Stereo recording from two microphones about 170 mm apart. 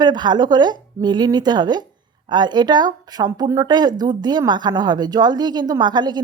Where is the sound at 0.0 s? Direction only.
25° right (ahead or behind).